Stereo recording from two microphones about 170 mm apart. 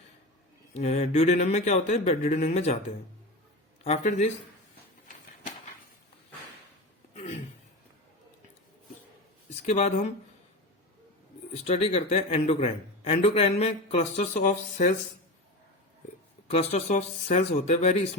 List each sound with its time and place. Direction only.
0.7 s a man's voice: 40° left (ahead or behind)
3.8 s a man's voice: 40° left (ahead or behind)
7.1 s a sound: 45° left (ahead or behind)
9.6 s a man's voice: 40° left (ahead or behind)
11.6 s a man's voice: 40° left (ahead or behind)
16.5 s a man's voice: 40° left (ahead or behind)